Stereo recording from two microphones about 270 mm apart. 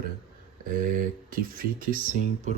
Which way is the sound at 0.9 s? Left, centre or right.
Right.